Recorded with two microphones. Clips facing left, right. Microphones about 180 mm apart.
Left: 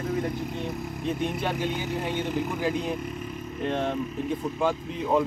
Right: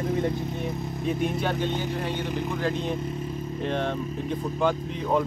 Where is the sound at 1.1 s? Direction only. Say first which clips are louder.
Right 2 dB; centre (ahead or behind).